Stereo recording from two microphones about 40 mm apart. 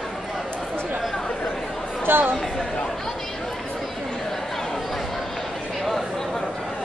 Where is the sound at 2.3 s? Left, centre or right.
Centre.